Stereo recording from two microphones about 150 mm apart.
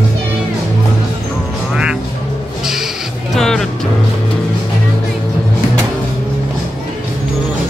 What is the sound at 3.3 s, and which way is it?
Music, centre (ahead or behind).